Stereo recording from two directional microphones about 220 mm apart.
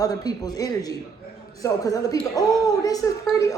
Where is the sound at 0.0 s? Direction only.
15° left (ahead or behind).